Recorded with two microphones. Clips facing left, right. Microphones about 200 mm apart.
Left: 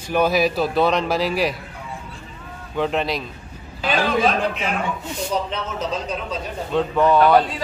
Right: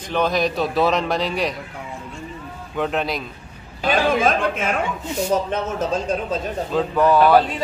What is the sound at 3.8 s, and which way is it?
A man's voice, 50° right (ahead or behind).